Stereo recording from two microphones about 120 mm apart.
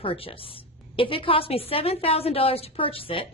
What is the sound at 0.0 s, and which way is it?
A woman's voice, 50° left (ahead or behind).